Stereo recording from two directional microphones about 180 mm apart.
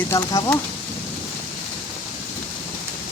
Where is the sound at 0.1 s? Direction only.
20° left (ahead or behind).